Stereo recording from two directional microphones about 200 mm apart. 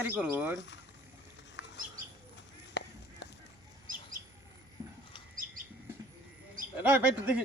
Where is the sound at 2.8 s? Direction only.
60° left (ahead or behind).